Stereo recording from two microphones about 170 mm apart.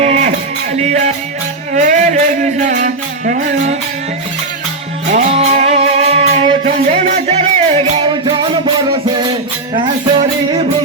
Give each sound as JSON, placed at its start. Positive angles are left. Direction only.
{"t": 0.0, "sound": "music", "side_deg": -45}
{"t": 5.1, "sound": "music", "side_deg": -45}